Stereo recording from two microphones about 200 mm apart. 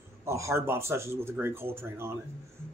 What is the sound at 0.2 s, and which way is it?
Speech, 15° right (ahead or behind).